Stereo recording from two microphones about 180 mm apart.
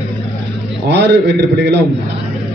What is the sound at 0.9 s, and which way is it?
Speech, 75° right (ahead or behind).